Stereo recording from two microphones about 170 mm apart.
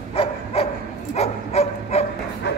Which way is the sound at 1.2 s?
35° left (ahead or behind).